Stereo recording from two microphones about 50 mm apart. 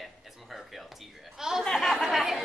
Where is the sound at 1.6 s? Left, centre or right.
Centre.